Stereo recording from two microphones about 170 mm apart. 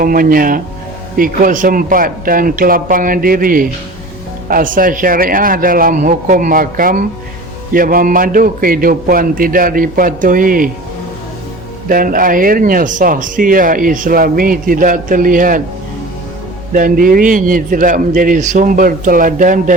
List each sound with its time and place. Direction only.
0.0 s a man's voice: 55° right (ahead or behind)
11.9 s speech: 55° right (ahead or behind)
16.7 s speech: 55° right (ahead or behind)